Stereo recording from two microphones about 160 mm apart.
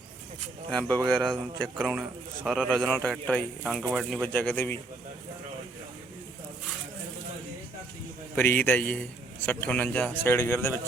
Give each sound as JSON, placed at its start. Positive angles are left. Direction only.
{"t": 0.7, "sound": "a man's voice", "side_deg": 10}
{"t": 1.2, "sound": "a man's voice", "side_deg": -30}
{"t": 1.6, "sound": "a man's voice", "side_deg": 0}
{"t": 8.4, "sound": "a man's voice", "side_deg": 10}